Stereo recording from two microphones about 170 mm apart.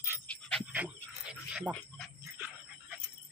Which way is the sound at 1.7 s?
5° left (ahead or behind).